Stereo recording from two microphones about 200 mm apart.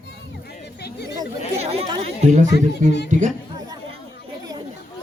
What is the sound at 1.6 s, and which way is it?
Speech, 30° right (ahead or behind).